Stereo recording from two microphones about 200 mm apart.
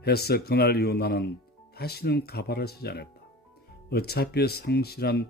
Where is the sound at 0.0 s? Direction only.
50° left (ahead or behind).